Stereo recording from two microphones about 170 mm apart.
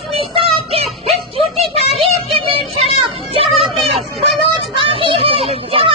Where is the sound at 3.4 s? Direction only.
35° right (ahead or behind).